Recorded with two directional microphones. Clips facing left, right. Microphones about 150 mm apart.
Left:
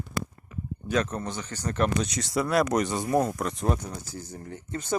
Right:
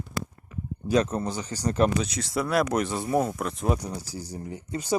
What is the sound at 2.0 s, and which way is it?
Speech, centre (ahead or behind).